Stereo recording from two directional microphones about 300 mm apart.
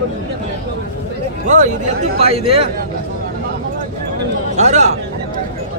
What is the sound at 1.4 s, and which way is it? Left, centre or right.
Speech, right.